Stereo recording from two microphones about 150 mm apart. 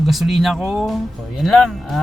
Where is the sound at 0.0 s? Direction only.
Centre (ahead or behind).